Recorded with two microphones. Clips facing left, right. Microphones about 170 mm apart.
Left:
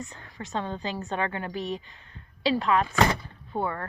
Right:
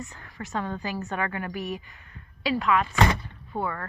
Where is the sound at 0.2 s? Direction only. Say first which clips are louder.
Right 1 dB; 25° left (ahead or behind).